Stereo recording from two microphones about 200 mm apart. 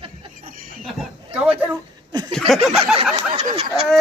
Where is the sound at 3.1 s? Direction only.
30° right (ahead or behind).